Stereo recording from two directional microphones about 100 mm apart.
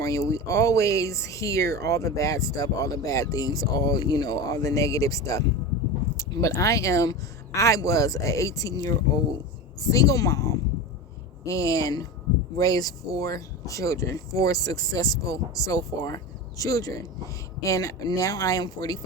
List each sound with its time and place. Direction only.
0.0 s speech: 35° left (ahead or behind)